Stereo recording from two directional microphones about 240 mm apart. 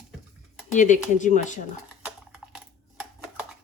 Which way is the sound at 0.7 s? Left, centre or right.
Left.